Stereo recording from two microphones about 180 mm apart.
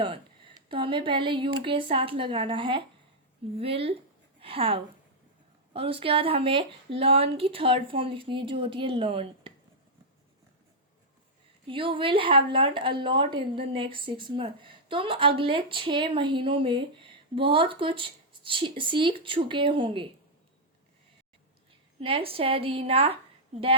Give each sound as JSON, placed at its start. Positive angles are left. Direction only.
{"t": 0.7, "sound": "a woman's voice", "side_deg": -30}
{"t": 11.6, "sound": "speech", "side_deg": -30}
{"t": 22.0, "sound": "speech", "side_deg": -30}